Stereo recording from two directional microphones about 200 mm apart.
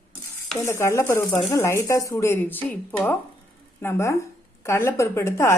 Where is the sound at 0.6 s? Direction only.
15° left (ahead or behind).